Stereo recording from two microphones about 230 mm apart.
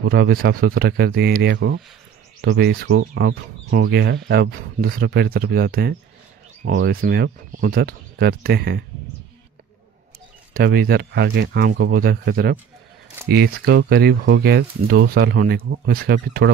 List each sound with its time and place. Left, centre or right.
0.0 s speech: right
10.5 s speech: right